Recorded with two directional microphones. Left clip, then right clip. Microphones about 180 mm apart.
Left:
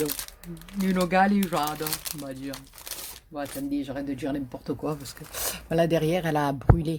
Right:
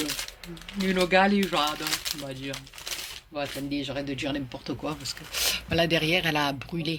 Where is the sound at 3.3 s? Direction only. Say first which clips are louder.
Even; 60° left (ahead or behind).